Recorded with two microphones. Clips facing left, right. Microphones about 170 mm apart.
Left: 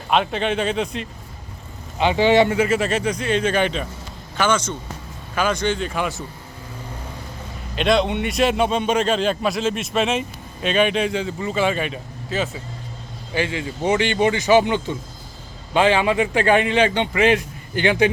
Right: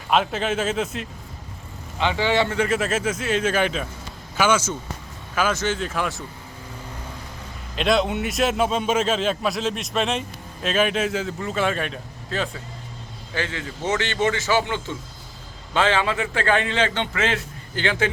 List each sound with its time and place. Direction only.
0.1 s a man's voice: centre (ahead or behind)
2.0 s a man's voice: 15° left (ahead or behind)
2.6 s a man's voice: centre (ahead or behind)
7.8 s a man's voice: centre (ahead or behind)
13.3 s a man's voice: 15° left (ahead or behind)